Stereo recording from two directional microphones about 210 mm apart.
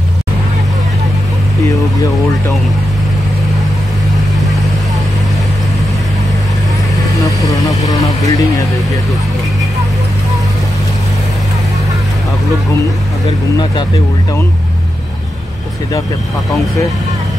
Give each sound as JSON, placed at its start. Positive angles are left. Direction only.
{"t": 7.2, "sound": "vehicle", "side_deg": 15}